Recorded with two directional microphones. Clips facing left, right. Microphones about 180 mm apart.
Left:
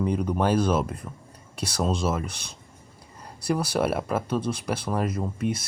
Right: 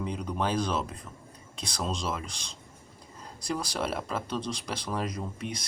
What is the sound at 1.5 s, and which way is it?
Speech, 10° left (ahead or behind).